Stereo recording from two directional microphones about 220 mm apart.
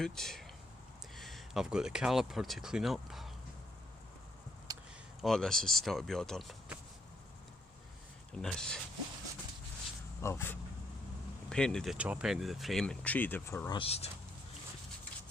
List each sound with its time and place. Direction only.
0.0 s speech: centre (ahead or behind)
4.7 s a sound: 15° right (ahead or behind)
5.2 s speech: centre (ahead or behind)
8.4 s speech: centre (ahead or behind)
10.2 s speech: 10° left (ahead or behind); by 14.1 s 25° left (ahead or behind)